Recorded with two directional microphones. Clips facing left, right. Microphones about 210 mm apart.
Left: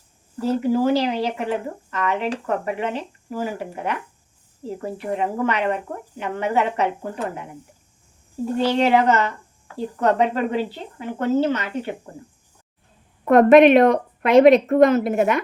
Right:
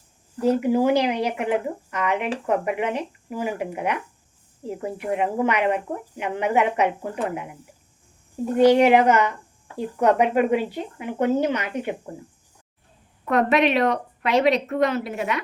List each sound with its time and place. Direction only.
0.3 s speech: 15° right (ahead or behind)
8.5 s speech: 15° right (ahead or behind)
13.2 s speech: 50° left (ahead or behind)